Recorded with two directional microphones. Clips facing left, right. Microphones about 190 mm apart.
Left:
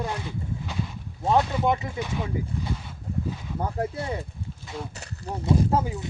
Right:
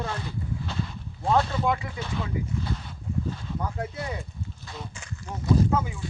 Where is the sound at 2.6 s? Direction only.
10° left (ahead or behind).